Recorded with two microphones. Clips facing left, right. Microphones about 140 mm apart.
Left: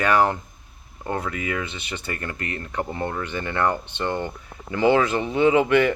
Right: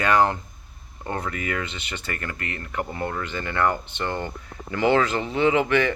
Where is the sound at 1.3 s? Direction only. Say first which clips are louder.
Left 1 dB; 20° left (ahead or behind).